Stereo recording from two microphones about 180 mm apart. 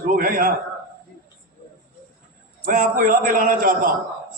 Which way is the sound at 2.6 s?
50° right (ahead or behind).